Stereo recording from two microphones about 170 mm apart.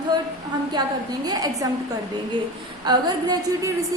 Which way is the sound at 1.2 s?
20° right (ahead or behind).